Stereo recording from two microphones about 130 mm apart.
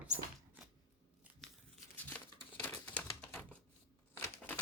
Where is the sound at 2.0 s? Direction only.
10° left (ahead or behind).